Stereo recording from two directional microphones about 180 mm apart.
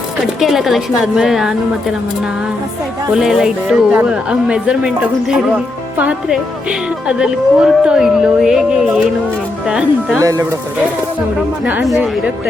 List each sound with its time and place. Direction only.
0.3 s a woman's voice: centre (ahead or behind)
3.2 s a woman's voice: 5° right (ahead or behind)
6.0 s a woman's voice: 5° right (ahead or behind)
10.2 s speech: 20° right (ahead or behind)
11.6 s a woman's voice: 5° right (ahead or behind)